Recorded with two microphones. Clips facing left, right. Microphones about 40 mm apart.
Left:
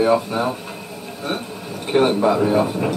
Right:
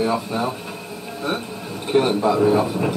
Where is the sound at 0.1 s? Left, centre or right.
Centre.